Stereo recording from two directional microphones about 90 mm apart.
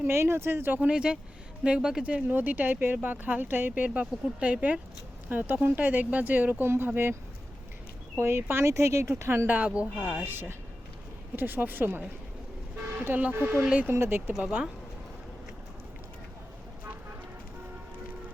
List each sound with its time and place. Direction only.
0.0 s speech: 30° right (ahead or behind)
8.2 s speech: 25° right (ahead or behind)